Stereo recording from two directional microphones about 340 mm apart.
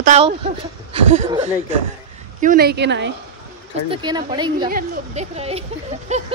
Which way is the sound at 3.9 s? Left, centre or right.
Centre.